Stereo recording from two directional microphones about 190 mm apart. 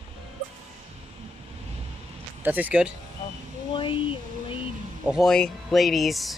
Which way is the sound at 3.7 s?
25° left (ahead or behind).